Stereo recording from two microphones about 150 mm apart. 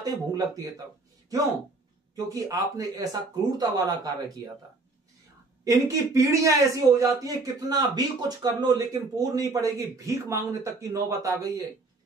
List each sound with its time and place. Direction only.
0.0 s speech: 25° right (ahead or behind)
2.1 s speech: 20° right (ahead or behind)
5.6 s speech: 20° right (ahead or behind)